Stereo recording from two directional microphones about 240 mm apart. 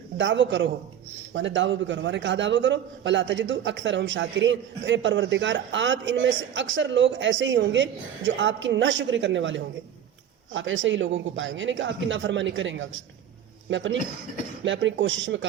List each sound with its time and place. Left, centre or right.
0.2 s a man's voice: right